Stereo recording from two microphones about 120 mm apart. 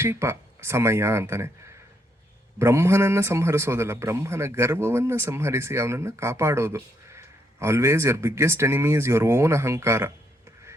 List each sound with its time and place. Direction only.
0.0 s a man's voice: 20° right (ahead or behind)
2.6 s a man's voice: 25° right (ahead or behind)